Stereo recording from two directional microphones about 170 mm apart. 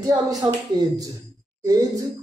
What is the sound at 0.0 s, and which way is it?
Speech, 25° right (ahead or behind).